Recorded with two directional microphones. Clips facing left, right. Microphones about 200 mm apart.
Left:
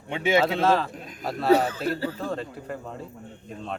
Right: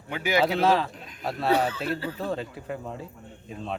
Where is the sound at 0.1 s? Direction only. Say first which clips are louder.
Left 3 dB; 25° left (ahead or behind).